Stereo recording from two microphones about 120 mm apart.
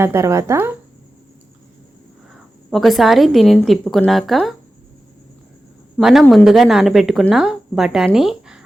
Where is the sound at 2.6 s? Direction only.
Centre (ahead or behind).